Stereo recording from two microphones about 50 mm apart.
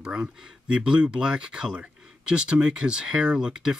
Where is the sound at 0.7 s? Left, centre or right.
Centre.